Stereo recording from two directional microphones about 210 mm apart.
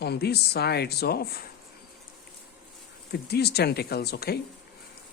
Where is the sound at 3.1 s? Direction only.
50° left (ahead or behind).